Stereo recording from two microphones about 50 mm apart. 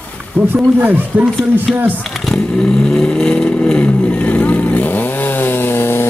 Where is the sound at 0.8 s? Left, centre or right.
Right.